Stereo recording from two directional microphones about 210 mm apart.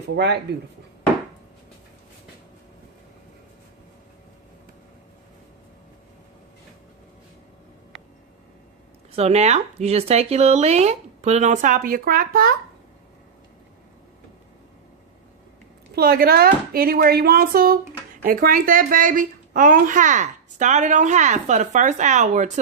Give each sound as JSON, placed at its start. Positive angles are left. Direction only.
{"t": 0.2, "sound": "speech", "side_deg": -50}
{"t": 9.1, "sound": "a woman's voice", "side_deg": -30}
{"t": 16.0, "sound": "a woman's voice", "side_deg": -45}